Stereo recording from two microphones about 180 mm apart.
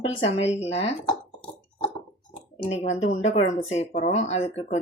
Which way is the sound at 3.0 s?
40° left (ahead or behind).